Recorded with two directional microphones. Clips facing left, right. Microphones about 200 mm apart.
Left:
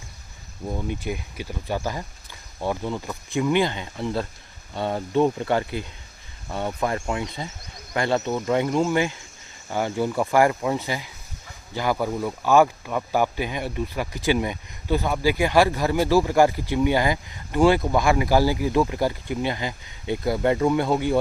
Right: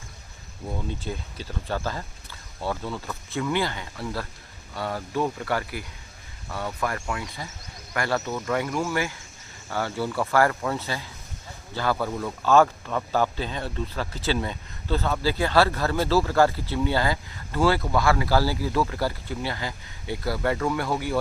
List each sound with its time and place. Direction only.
0.7 s speech: 15° left (ahead or behind)